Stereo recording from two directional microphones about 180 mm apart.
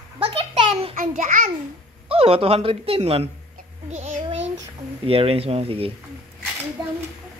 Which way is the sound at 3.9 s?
40° right (ahead or behind).